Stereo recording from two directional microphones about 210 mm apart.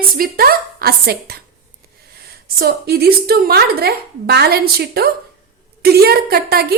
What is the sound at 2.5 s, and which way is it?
A woman's voice, 50° right (ahead or behind).